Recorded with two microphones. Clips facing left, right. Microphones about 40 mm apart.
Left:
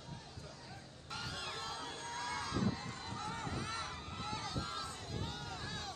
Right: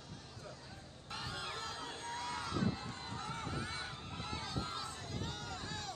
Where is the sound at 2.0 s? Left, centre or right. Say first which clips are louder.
Even; right.